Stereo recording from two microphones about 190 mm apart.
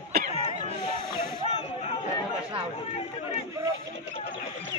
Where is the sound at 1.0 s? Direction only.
25° left (ahead or behind).